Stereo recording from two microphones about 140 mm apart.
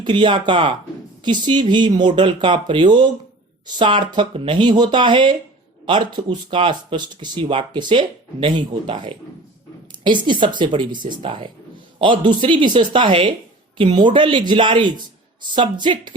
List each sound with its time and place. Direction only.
0.0 s speech: 35° right (ahead or behind)